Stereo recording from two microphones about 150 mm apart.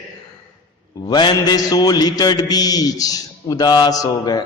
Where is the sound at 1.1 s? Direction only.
30° left (ahead or behind).